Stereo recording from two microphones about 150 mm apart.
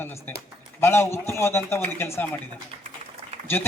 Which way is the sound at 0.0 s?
15° left (ahead or behind).